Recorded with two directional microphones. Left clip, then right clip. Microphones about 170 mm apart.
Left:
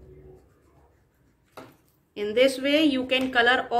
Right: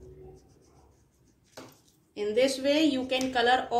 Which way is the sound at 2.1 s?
50° left (ahead or behind).